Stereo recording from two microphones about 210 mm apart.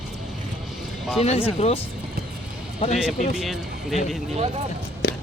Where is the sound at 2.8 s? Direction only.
30° left (ahead or behind).